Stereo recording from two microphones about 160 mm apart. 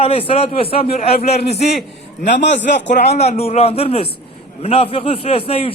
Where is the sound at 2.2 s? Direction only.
90° left.